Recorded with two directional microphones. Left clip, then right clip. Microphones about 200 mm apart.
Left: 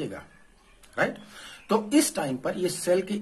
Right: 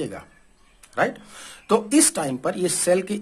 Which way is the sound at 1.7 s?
40° right (ahead or behind).